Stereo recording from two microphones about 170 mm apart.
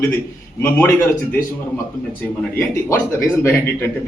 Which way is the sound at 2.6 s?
15° left (ahead or behind).